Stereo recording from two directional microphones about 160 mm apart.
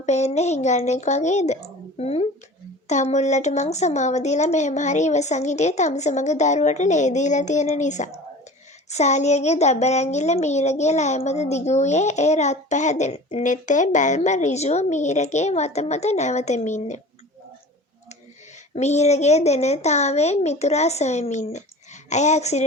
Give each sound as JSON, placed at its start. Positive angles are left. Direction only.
{"t": 0.0, "sound": "speech", "side_deg": 45}
{"t": 18.7, "sound": "speech", "side_deg": 45}